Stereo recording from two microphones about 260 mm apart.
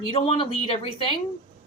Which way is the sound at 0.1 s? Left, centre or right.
Left.